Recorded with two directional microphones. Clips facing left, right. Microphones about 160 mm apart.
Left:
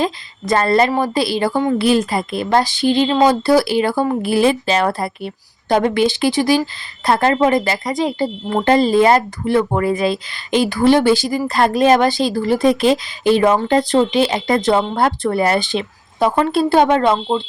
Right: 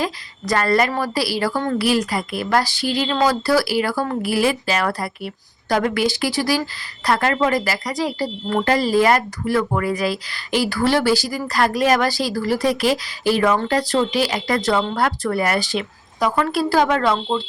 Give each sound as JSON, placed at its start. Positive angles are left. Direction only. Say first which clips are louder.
{"t": 0.0, "sound": "speech", "louder": "left 4 dB", "side_deg": 25}